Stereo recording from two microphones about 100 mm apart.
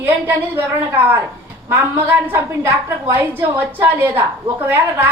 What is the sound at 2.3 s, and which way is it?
A woman's voice, 25° right (ahead or behind).